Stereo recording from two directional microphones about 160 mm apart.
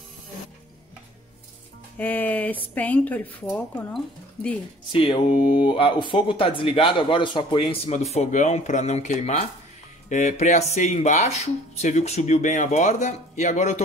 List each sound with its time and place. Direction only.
2.0 s speech: 10° left (ahead or behind)
4.9 s speech: 35° left (ahead or behind)